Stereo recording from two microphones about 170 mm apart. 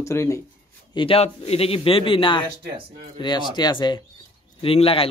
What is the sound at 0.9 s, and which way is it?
A man's voice, 30° left (ahead or behind).